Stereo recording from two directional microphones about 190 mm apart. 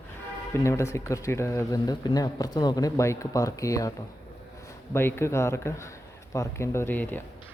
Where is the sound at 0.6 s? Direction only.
15° left (ahead or behind).